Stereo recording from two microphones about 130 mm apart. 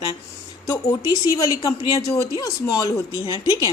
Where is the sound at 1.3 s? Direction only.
25° left (ahead or behind).